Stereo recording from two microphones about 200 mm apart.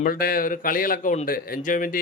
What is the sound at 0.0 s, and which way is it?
A man's voice, 45° left (ahead or behind).